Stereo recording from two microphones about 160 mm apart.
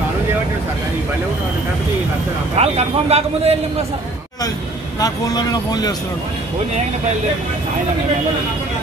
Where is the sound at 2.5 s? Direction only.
40° right (ahead or behind).